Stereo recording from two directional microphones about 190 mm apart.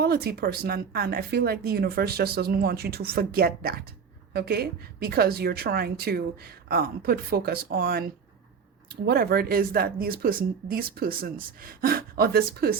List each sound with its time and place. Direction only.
0.0 s a woman's voice: 55° right (ahead or behind)
9.0 s a woman's voice: 55° right (ahead or behind)